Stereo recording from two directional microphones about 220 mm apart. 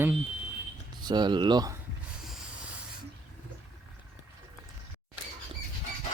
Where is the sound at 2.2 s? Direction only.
5° right (ahead or behind).